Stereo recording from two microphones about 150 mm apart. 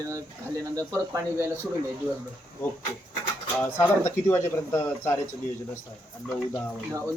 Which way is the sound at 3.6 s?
20° left (ahead or behind).